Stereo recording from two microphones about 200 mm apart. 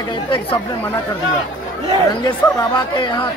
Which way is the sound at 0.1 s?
25° left (ahead or behind).